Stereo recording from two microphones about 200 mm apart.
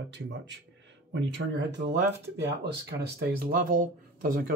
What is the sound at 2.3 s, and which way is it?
Speech, 60° right (ahead or behind).